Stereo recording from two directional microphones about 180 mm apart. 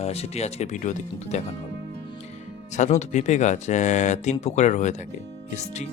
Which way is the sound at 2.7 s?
40° left (ahead or behind).